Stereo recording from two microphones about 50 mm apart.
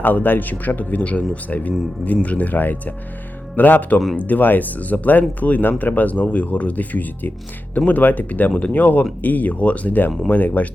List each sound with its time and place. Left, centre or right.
0.0 s speech: left